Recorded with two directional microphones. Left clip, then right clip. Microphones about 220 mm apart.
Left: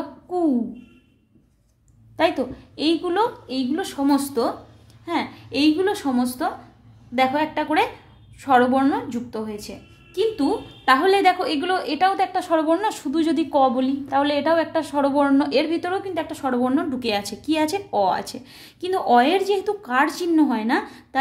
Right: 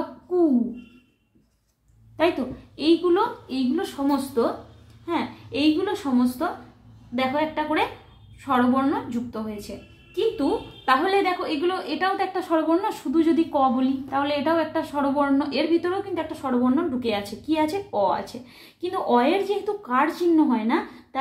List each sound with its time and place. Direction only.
2.1 s a woman's voice: 40° left (ahead or behind)
10.9 s a woman's voice: 50° left (ahead or behind)